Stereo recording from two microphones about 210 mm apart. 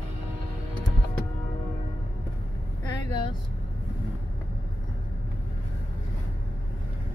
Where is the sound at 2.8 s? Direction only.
20° left (ahead or behind).